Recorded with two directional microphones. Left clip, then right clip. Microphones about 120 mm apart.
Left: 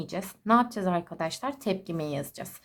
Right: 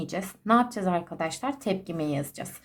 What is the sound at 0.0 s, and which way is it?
Speech, 35° left (ahead or behind).